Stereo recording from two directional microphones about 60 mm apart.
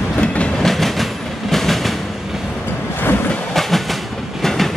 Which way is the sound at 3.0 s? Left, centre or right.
Left.